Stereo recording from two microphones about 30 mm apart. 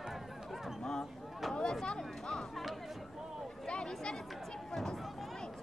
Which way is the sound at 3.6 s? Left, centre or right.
Left.